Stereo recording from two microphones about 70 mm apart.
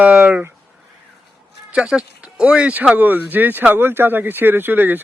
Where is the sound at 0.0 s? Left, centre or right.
Right.